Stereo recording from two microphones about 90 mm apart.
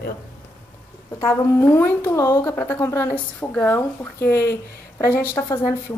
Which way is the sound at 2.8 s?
30° left (ahead or behind).